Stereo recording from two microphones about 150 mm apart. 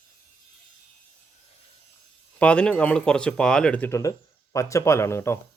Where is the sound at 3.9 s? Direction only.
20° left (ahead or behind).